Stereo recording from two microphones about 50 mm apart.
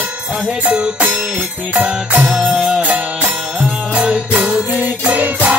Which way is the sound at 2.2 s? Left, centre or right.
Centre.